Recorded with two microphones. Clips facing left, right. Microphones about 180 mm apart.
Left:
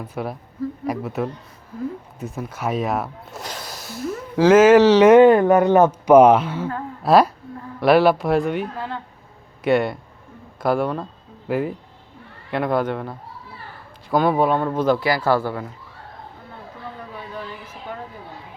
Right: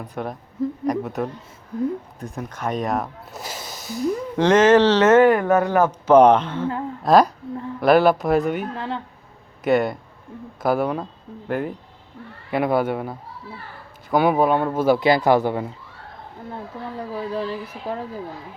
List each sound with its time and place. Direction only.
0.0 s speech: 5° left (ahead or behind); by 5.9 s 20° left (ahead or behind)
6.1 s a woman's voice: 5° left (ahead or behind)
9.6 s speech: centre (ahead or behind)
14.2 s speech: 5° right (ahead or behind)
14.9 s speech: 20° right (ahead or behind)
17.0 s a sound: 35° right (ahead or behind)